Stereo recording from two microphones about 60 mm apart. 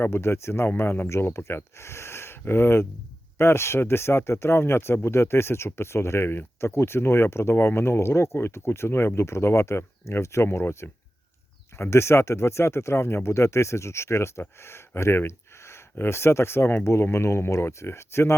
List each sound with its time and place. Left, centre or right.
0.0 s speech: left